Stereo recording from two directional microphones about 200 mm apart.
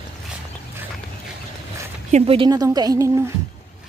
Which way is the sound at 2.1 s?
30° right (ahead or behind).